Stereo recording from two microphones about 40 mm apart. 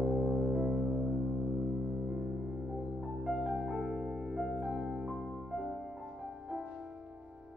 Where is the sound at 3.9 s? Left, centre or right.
Right.